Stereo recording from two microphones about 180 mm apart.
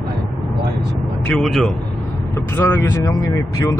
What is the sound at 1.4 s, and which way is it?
Speech, centre (ahead or behind).